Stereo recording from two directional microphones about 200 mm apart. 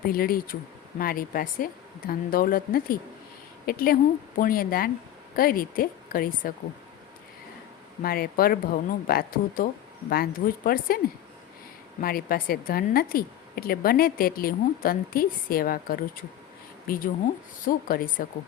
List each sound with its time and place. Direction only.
0.1 s a woman's voice: 45° left (ahead or behind)
8.0 s a woman's voice: 50° left (ahead or behind)